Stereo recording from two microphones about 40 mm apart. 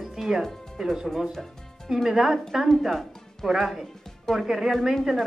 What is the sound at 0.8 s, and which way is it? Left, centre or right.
Speech, centre.